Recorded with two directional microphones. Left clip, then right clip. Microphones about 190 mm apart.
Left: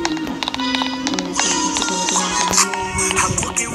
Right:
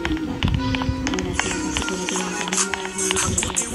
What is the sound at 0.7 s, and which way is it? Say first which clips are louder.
Music: left 4 dB; centre (ahead or behind).